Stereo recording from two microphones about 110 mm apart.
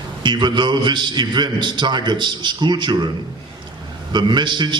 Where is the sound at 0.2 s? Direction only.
45° right (ahead or behind).